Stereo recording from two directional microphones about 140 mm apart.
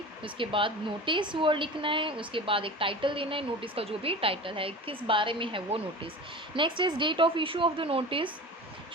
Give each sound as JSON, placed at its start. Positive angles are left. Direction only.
{"t": 0.2, "sound": "a woman's voice", "side_deg": -40}